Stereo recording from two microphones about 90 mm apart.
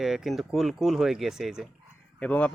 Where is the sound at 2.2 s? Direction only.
15° left (ahead or behind).